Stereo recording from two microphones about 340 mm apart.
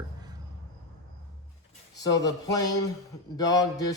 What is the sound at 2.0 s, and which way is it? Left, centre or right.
Speech, centre.